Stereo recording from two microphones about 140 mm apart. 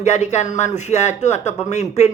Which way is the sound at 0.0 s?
55° left (ahead or behind).